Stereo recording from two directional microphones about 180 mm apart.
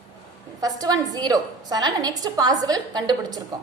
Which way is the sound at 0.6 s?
20° right (ahead or behind).